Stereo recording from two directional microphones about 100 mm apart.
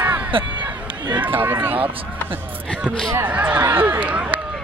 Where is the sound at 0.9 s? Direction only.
50° right (ahead or behind).